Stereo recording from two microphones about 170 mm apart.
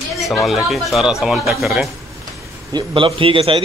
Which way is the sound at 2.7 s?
30° right (ahead or behind).